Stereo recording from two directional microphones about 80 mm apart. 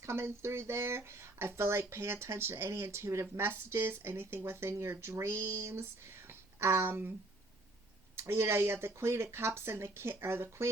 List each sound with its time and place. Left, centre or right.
0.0 s speech: right
8.1 s speech: right